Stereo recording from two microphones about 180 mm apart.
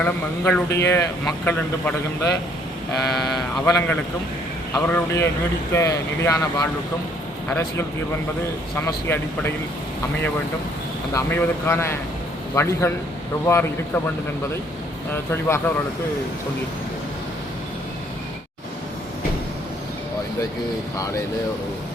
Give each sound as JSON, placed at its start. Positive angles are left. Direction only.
{"t": 0.0, "sound": "speech", "side_deg": 10}
{"t": 3.7, "sound": "speech", "side_deg": 15}
{"t": 11.1, "sound": "speech", "side_deg": 10}
{"t": 15.1, "sound": "speech", "side_deg": 15}